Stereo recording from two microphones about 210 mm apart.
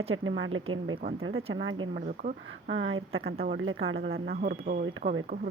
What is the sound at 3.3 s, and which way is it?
Speech, 45° right (ahead or behind).